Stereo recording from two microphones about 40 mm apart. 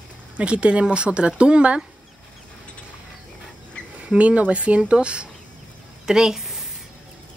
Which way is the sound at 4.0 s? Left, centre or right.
Right.